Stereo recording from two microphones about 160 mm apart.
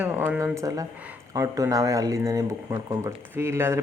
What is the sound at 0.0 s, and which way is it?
Speech, 10° right (ahead or behind).